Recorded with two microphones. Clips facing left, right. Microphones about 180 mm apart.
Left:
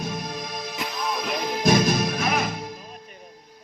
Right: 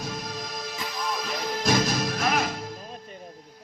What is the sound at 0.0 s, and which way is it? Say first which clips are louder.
Music: left 3 dB; 55° left (ahead or behind).